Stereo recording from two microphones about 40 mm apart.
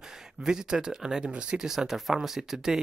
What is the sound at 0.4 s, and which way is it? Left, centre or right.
Speech, centre.